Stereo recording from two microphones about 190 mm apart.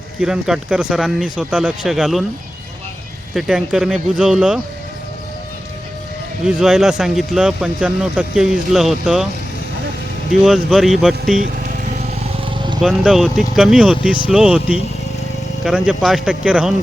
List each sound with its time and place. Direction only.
0.2 s speech: 5° right (ahead or behind)
3.3 s speech: centre (ahead or behind)
6.4 s speech: 5° right (ahead or behind)
10.4 s speech: centre (ahead or behind)
12.5 s vehicle: 25° right (ahead or behind)
12.8 s speech: centre (ahead or behind)